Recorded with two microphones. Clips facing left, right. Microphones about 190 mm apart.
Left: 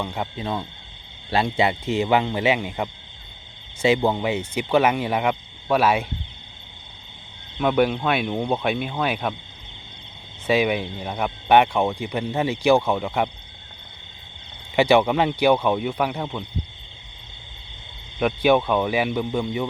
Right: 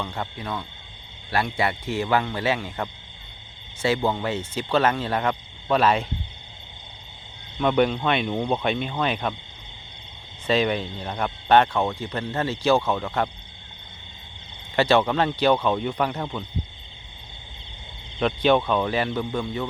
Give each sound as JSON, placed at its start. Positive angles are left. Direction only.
{"t": 0.0, "sound": "speech", "side_deg": 15}
{"t": 7.6, "sound": "speech", "side_deg": 5}
{"t": 10.4, "sound": "speech", "side_deg": 10}
{"t": 14.8, "sound": "speech", "side_deg": 15}
{"t": 18.2, "sound": "speech", "side_deg": 10}